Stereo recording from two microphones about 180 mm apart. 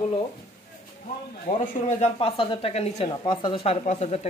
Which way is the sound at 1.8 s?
40° left (ahead or behind).